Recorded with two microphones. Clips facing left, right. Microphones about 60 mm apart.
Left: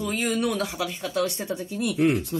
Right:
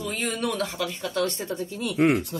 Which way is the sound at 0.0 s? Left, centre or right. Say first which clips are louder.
Left 3 dB; centre.